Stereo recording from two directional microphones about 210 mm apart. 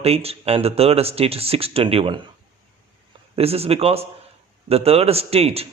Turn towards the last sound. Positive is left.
turn(degrees=-30)  # may be behind; listen again after turning